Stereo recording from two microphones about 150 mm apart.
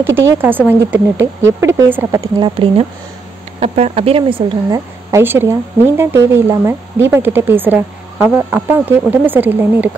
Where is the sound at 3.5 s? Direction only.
45° right (ahead or behind).